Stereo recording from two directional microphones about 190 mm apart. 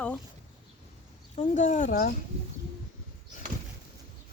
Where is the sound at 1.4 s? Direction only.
40° left (ahead or behind).